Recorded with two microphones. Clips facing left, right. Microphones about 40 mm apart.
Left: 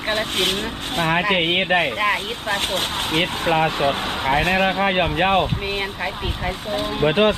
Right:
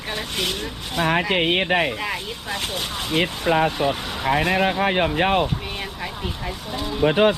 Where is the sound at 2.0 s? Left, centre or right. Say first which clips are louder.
Left 7 dB; left.